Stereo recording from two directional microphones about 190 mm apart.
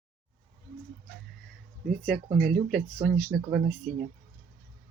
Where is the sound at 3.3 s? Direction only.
Centre (ahead or behind).